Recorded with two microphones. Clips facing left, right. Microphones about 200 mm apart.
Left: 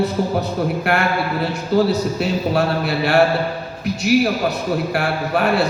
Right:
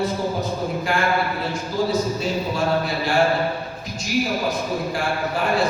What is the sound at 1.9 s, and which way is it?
A man's voice, 65° left (ahead or behind).